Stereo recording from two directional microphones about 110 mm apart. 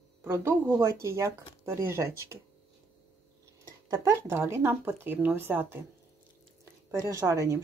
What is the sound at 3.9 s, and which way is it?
A woman's voice, 25° right (ahead or behind).